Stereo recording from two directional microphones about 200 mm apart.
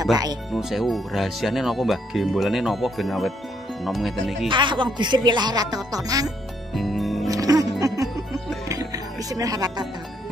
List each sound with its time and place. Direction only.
0.5 s speech: centre (ahead or behind)
4.5 s speech: 25° right (ahead or behind)
6.2 s music: centre (ahead or behind)
7.2 s music: 15° right (ahead or behind)